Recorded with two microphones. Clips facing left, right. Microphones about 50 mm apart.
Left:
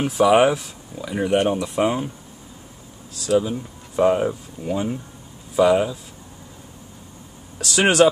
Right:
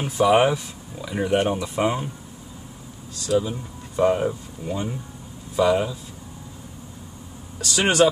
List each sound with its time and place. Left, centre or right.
0.2 s speech: centre
3.3 s speech: centre
7.6 s speech: centre